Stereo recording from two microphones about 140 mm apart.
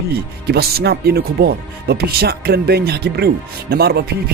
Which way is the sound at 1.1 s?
90° right.